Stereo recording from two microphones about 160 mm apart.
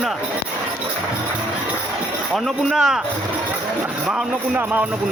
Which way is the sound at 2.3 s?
Centre (ahead or behind).